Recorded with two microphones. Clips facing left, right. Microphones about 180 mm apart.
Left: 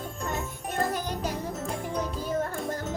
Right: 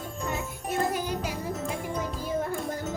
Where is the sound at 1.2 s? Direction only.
10° right (ahead or behind).